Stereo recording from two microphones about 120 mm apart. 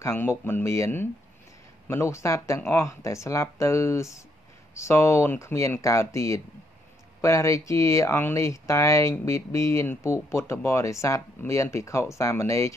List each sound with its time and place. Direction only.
0.0 s speech: 20° left (ahead or behind)